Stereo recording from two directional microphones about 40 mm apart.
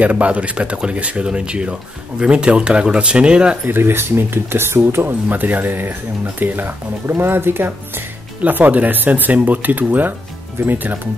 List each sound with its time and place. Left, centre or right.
0.0 s speech: right
3.6 s speech: right
5.3 s speech: right
8.4 s speech: right